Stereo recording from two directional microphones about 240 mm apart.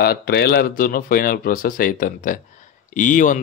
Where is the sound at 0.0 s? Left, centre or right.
Left.